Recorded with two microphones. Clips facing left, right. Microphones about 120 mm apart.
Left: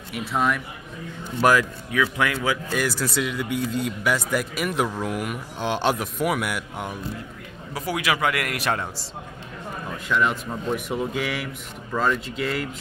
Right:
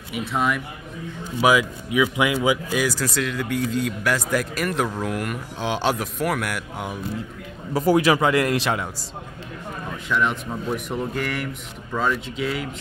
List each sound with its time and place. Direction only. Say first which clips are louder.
0.1 s a man's voice: even; centre (ahead or behind)
1.9 s speech: right 5 dB; 15° right (ahead or behind)
2.8 s a man's voice: right 1 dB; centre (ahead or behind)
7.7 s speech: right 8 dB; 40° right (ahead or behind)
10.0 s a man's voice: even; centre (ahead or behind)